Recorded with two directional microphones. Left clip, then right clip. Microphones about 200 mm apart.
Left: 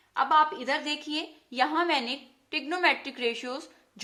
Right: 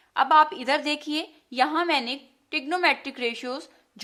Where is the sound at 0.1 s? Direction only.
35° right (ahead or behind).